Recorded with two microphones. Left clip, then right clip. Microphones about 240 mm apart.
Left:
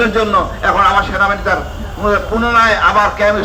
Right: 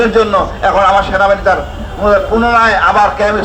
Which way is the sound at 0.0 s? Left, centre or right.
Right.